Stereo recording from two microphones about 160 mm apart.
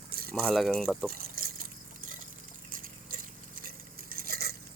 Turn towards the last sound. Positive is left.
turn(degrees=-70)  # may be behind; listen again after turning